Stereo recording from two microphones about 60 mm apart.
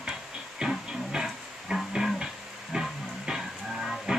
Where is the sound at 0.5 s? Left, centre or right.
Centre.